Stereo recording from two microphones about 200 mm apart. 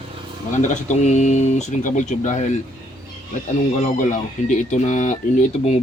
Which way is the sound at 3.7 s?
35° left (ahead or behind).